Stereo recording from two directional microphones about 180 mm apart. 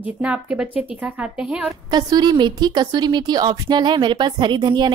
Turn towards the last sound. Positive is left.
turn(degrees=-25)  # may be behind; listen again after turning